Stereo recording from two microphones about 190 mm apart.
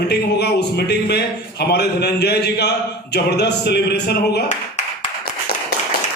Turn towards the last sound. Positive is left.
turn(degrees=60)  # may be behind; listen again after turning